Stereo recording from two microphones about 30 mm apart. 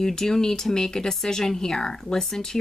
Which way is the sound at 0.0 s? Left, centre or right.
Centre.